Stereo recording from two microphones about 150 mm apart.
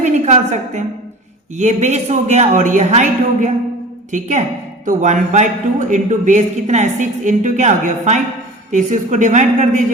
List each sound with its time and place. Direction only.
0.0 s a woman's voice: 55° right (ahead or behind)